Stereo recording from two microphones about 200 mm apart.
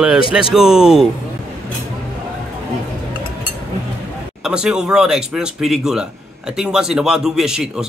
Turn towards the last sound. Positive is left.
turn(degrees=-5)  # may be behind; listen again after turning